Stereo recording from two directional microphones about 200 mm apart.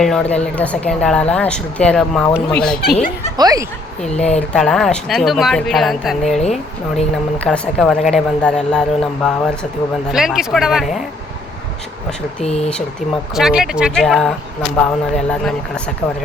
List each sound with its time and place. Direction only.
0.0 s a woman's voice: 5° left (ahead or behind)
2.8 s speech: 50° left (ahead or behind)
3.3 s speech: 20° right (ahead or behind)
4.4 s a woman's voice: centre (ahead or behind)
12.4 s speech: 30° left (ahead or behind)
13.3 s a woman's voice: centre (ahead or behind)